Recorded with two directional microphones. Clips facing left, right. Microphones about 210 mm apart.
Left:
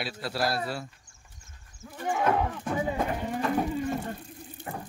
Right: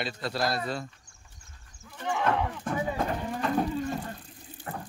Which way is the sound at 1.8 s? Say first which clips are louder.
Left 2 dB; 50° left (ahead or behind).